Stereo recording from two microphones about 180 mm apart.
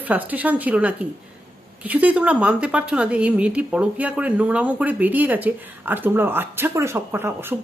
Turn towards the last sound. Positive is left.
turn(degrees=-10)  # may be behind; listen again after turning